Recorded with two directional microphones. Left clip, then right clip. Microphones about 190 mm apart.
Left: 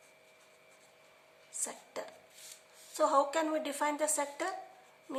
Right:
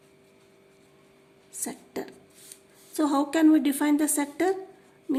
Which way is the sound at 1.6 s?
35° right (ahead or behind).